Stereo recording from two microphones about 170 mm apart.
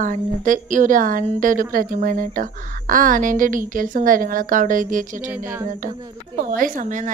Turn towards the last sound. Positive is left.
turn(degrees=-50)  # may be behind; listen again after turning